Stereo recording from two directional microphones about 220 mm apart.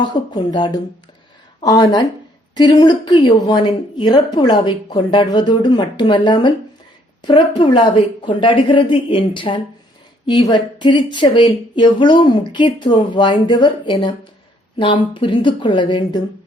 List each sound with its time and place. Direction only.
0.0 s speech: 20° left (ahead or behind)
15.1 s speech: 20° left (ahead or behind)